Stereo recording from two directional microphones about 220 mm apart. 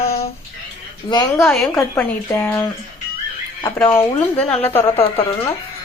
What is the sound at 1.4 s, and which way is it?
A woman's voice, centre (ahead or behind).